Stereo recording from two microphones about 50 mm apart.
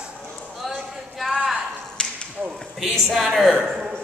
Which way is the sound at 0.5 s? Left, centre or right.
Centre.